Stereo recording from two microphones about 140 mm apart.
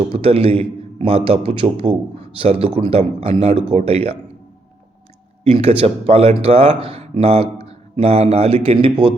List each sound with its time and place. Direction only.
0.1 s a man's voice: 45° right (ahead or behind)
5.4 s a man's voice: 45° right (ahead or behind)